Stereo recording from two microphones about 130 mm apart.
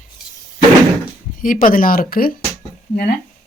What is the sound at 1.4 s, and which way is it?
Speech, 90° left.